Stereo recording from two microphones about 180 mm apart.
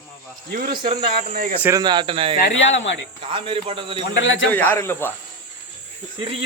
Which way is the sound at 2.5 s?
90° left.